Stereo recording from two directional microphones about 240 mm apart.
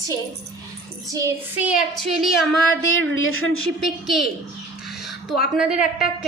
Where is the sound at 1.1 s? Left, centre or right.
Centre.